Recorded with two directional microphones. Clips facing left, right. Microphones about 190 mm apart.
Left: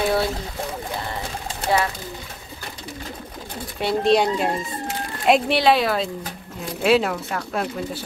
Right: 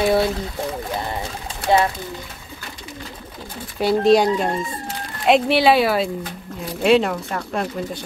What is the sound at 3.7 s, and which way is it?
Speech, centre (ahead or behind).